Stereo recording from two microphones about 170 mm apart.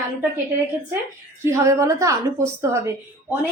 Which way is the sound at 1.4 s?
15° right (ahead or behind).